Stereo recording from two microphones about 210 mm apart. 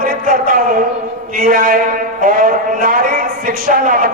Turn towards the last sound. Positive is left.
turn(degrees=-40)  # may be behind; listen again after turning